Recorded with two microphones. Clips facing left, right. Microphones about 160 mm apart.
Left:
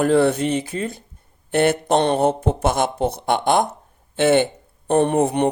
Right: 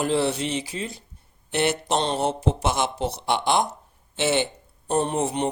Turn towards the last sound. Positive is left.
turn(degrees=55)  # may be behind; listen again after turning